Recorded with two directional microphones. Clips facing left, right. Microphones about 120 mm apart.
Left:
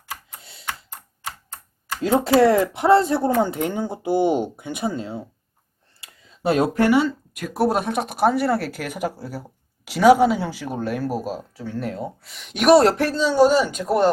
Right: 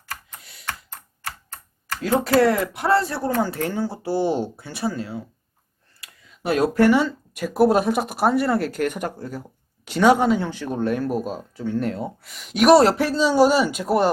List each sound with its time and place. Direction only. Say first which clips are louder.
0.6 s computer keyboard: left 1 dB; 10° left (ahead or behind)
1.9 s speech: left 2 dB; 20° left (ahead or behind)
6.0 s a sound: left 6 dB; 25° left (ahead or behind)
7.3 s speech: right 5 dB; centre (ahead or behind)